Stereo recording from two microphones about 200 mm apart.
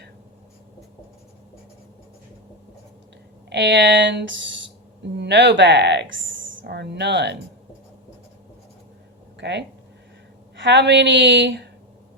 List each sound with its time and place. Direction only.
3.5 s speech: 60° right (ahead or behind)
9.4 s speech: 60° right (ahead or behind)